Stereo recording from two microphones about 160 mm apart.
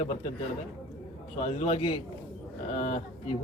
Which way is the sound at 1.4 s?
40° left (ahead or behind).